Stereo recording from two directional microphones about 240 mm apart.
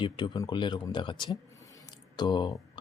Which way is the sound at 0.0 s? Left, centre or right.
Centre.